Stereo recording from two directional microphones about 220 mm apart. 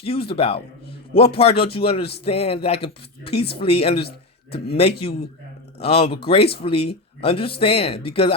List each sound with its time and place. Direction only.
0.0 s speech: 25° left (ahead or behind)
5.8 s speech: 25° left (ahead or behind)